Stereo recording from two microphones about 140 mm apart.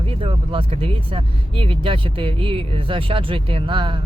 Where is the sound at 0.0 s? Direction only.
40° right (ahead or behind).